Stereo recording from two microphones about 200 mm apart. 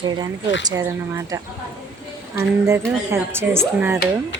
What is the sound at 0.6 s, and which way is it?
Speech, 15° right (ahead or behind).